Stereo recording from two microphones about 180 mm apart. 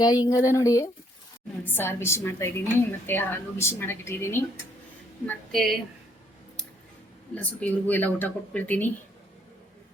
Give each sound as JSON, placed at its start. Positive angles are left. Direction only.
{"t": 0.0, "sound": "a woman's voice", "side_deg": 20}
{"t": 7.3, "sound": "a woman's voice", "side_deg": 10}